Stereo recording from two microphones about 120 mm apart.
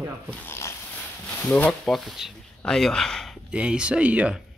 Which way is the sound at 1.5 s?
5° left (ahead or behind).